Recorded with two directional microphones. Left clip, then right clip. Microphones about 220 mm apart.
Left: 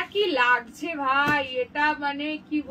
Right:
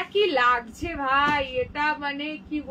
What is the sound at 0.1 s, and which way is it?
A woman's voice, 10° right (ahead or behind).